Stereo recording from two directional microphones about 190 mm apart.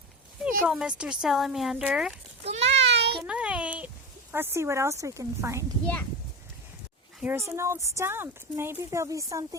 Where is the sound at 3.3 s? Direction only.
5° right (ahead or behind).